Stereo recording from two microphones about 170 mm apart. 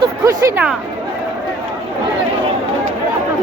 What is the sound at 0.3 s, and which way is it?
Speech, 20° right (ahead or behind).